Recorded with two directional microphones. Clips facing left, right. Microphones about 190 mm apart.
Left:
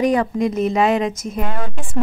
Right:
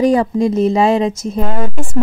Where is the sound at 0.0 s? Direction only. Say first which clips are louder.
Right 4 dB; 30° right (ahead or behind).